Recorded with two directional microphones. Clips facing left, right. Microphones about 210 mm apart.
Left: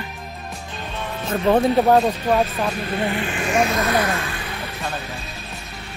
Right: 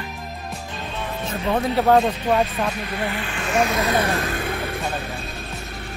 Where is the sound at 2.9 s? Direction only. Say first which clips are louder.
Left 4 dB; 20° left (ahead or behind).